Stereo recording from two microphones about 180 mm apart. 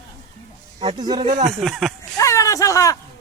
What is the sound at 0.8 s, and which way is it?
Speech, 25° right (ahead or behind).